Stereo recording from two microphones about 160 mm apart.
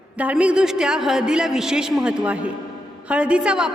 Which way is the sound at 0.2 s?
10° right (ahead or behind).